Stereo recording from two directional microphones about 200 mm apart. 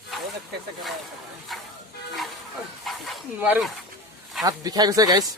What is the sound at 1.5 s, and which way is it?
Vehicle, centre (ahead or behind).